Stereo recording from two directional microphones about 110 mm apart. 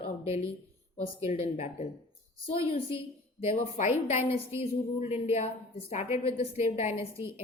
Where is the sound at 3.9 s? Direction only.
80° left.